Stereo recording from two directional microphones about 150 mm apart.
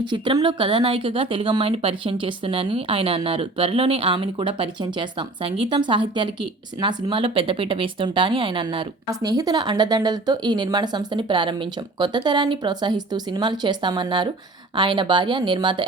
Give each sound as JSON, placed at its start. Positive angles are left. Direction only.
{"t": 0.0, "sound": "a woman's voice", "side_deg": -30}